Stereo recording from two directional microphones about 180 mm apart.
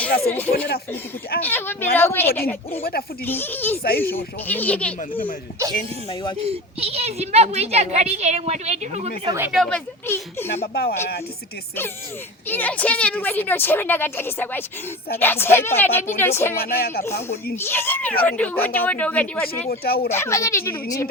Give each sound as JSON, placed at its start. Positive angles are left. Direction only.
{"t": 0.0, "sound": "a woman's voice", "side_deg": 10}
{"t": 3.8, "sound": "speech", "side_deg": 60}
{"t": 4.1, "sound": "a woman's voice", "side_deg": 10}
{"t": 6.4, "sound": "a woman's voice", "side_deg": -35}
{"t": 9.5, "sound": "speech", "side_deg": 5}
{"t": 12.5, "sound": "a woman's voice", "side_deg": 10}
{"t": 16.6, "sound": "speech", "side_deg": 55}
{"t": 17.0, "sound": "a woman's voice", "side_deg": 15}
{"t": 19.8, "sound": "speech", "side_deg": 60}
{"t": 20.1, "sound": "a woman's voice", "side_deg": 15}